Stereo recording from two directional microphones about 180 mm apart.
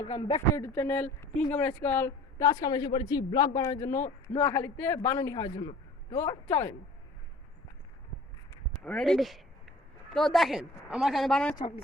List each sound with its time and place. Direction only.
0.0 s speech: 30° left (ahead or behind)
0.5 s speech: 15° left (ahead or behind)
6.1 s speech: 15° left (ahead or behind)
8.7 s a woman's voice: 5° left (ahead or behind)